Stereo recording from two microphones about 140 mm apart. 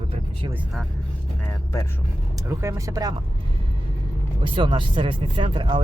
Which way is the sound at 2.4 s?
20° right (ahead or behind).